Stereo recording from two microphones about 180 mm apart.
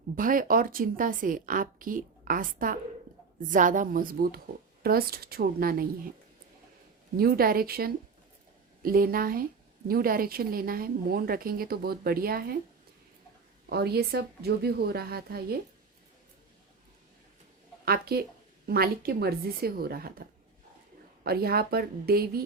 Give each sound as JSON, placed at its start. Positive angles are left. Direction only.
{"t": 0.2, "sound": "a woman's voice", "side_deg": -50}
{"t": 7.2, "sound": "a woman's voice", "side_deg": -55}
{"t": 13.7, "sound": "a woman's voice", "side_deg": -60}
{"t": 17.8, "sound": "a woman's voice", "side_deg": -60}
{"t": 21.2, "sound": "a woman's voice", "side_deg": -60}